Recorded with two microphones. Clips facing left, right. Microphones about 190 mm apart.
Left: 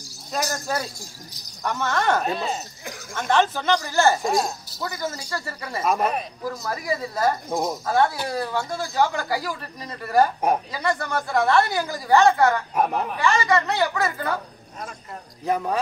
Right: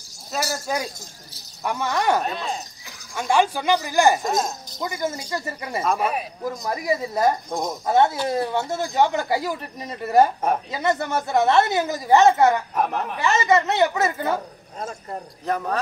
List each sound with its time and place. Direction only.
0.3 s speech: 10° right (ahead or behind)
2.2 s speech: 5° left (ahead or behind)
3.2 s speech: 10° right (ahead or behind)
4.2 s speech: centre (ahead or behind)
4.8 s speech: 10° right (ahead or behind)
6.4 s speech: 20° right (ahead or behind)
7.4 s speech: 5° left (ahead or behind)
7.8 s speech: 20° right (ahead or behind)
12.7 s speech: centre (ahead or behind)
13.2 s speech: 20° right (ahead or behind)
15.4 s speech: 10° left (ahead or behind)